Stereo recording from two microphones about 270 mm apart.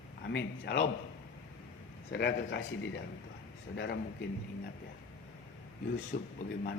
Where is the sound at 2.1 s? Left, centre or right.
Left.